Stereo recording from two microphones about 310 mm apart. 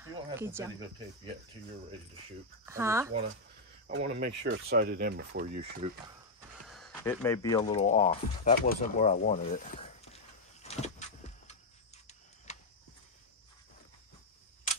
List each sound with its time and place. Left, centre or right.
0.0 s speech: centre
2.6 s speech: centre
3.8 s speech: right
5.8 s speech: centre
6.7 s speech: centre
10.6 s vehicle: left